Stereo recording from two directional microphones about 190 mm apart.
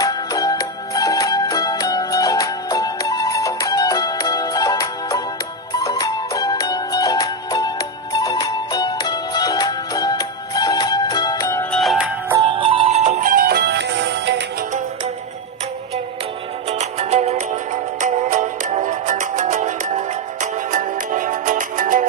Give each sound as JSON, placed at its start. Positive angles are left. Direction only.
{"t": 0.0, "sound": "music", "side_deg": 20}
{"t": 11.8, "sound": "music", "side_deg": 0}
{"t": 12.4, "sound": "music", "side_deg": -25}
{"t": 16.6, "sound": "music", "side_deg": -35}